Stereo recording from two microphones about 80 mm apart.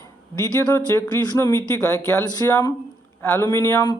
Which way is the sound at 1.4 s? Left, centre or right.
Left.